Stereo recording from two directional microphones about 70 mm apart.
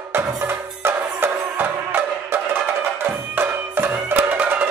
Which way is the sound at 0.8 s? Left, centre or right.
Right.